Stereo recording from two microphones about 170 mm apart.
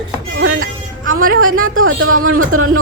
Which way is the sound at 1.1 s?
55° right (ahead or behind).